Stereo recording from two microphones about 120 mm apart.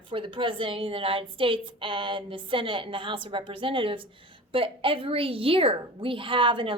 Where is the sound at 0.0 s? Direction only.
45° right (ahead or behind).